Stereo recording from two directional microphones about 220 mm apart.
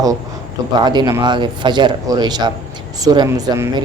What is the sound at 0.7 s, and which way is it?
A man's voice, 20° right (ahead or behind).